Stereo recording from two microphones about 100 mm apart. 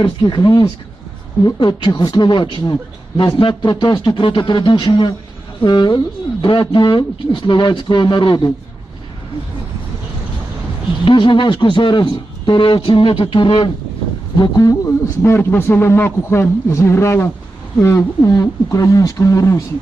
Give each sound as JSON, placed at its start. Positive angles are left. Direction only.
{"t": 0.0, "sound": "a man's voice", "side_deg": 55}
{"t": 11.0, "sound": "speech", "side_deg": 60}
{"t": 14.3, "sound": "a man's voice", "side_deg": 45}